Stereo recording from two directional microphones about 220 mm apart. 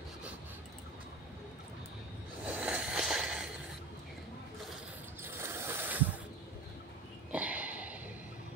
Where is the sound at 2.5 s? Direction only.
5° right (ahead or behind).